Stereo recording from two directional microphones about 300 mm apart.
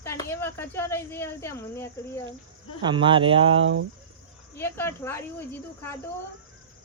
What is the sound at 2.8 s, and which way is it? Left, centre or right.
Speech, centre.